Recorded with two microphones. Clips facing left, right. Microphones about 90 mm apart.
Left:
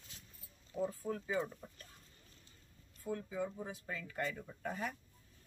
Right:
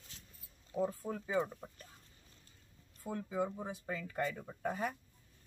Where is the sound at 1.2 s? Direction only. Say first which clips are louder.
Right 5 dB; 15° right (ahead or behind).